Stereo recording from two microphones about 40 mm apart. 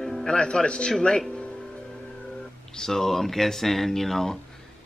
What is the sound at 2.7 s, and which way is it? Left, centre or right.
Speech, centre.